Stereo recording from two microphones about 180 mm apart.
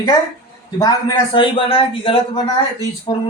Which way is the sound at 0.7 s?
25° left (ahead or behind).